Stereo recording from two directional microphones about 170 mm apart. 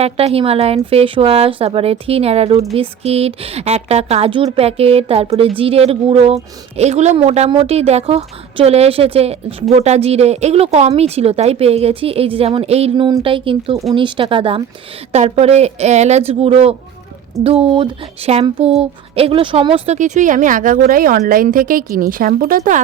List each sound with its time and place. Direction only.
0.0 s speech: 35° right (ahead or behind); by 22.8 s 55° right (ahead or behind)